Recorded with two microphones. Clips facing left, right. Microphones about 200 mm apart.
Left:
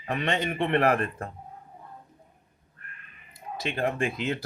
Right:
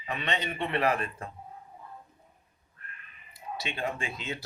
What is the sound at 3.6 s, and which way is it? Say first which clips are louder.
Speech: left 7 dB; 50° left (ahead or behind).